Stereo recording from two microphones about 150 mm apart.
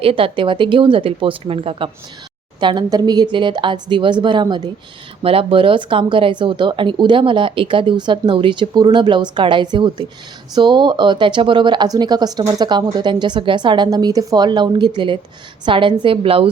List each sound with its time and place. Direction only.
0.0 s a woman's voice: 40° right (ahead or behind)